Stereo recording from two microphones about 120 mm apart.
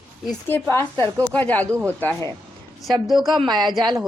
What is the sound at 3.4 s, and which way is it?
Speech, 40° right (ahead or behind).